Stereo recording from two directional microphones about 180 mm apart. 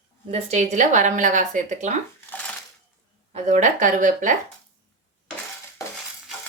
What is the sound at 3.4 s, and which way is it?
Speech, 45° right (ahead or behind).